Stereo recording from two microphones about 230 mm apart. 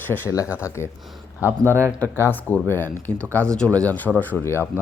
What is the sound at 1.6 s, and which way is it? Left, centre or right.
Speech, centre.